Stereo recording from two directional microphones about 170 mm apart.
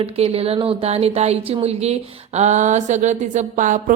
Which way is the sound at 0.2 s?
35° right (ahead or behind).